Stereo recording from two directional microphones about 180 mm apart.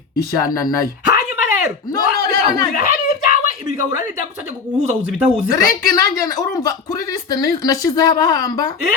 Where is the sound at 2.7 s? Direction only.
50° left (ahead or behind).